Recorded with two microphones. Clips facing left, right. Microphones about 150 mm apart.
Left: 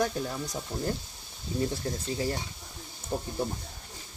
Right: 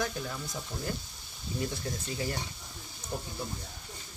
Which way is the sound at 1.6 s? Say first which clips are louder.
Left 5 dB; 30° left (ahead or behind).